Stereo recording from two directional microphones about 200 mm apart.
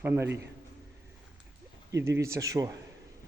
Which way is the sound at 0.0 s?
10° right (ahead or behind).